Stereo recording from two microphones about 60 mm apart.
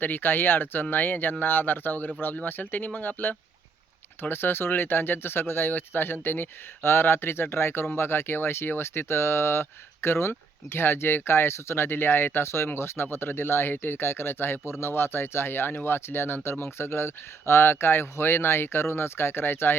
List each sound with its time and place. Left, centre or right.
0.0 s speech: left